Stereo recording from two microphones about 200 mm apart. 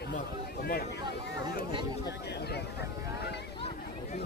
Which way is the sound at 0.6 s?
50° left (ahead or behind).